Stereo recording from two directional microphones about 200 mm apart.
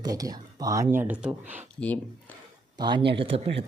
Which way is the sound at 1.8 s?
5° left (ahead or behind).